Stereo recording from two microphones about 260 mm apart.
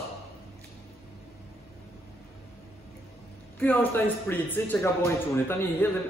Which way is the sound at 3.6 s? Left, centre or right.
Centre.